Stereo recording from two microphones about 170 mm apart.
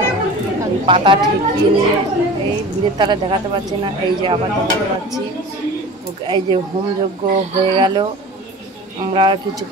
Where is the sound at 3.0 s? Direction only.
25° right (ahead or behind).